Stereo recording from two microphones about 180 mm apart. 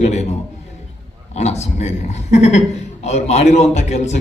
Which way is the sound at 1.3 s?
40° left (ahead or behind).